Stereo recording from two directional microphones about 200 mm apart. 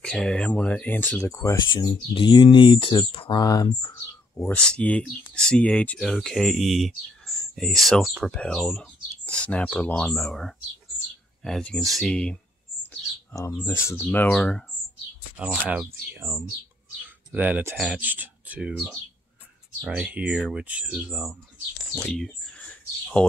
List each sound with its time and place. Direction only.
0.0 s speech: 5° left (ahead or behind)
4.4 s speech: 5° left (ahead or behind)
12.8 s chirp: 10° left (ahead or behind)
13.7 s speech: 10° left (ahead or behind)
15.3 s speech: 5° right (ahead or behind)